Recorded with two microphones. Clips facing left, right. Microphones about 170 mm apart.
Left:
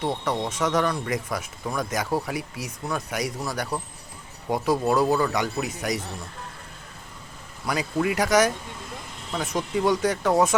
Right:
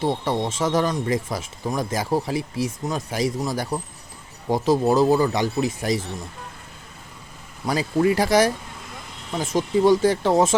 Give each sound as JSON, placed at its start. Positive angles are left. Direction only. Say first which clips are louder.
{"t": 0.0, "sound": "speech", "louder": "right 3 dB", "side_deg": -30}
{"t": 7.7, "sound": "speech", "louder": "right 5 dB", "side_deg": -30}